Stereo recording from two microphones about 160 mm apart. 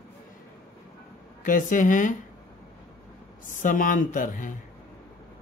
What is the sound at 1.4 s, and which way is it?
Speech, 55° left (ahead or behind).